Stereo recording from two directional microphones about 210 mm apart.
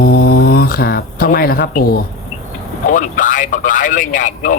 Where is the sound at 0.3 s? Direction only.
45° left (ahead or behind).